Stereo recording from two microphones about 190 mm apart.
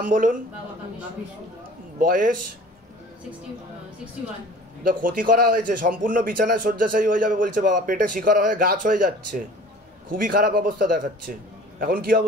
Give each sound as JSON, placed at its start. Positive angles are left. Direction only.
{"t": 0.0, "sound": "a man's voice", "side_deg": -45}
{"t": 2.0, "sound": "a man's voice", "side_deg": -45}
{"t": 4.8, "sound": "a man's voice", "side_deg": -45}